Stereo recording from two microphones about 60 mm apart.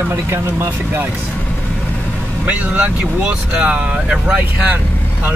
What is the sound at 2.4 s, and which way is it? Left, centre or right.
Speech, right.